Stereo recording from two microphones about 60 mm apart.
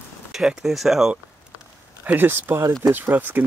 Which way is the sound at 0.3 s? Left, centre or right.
Centre.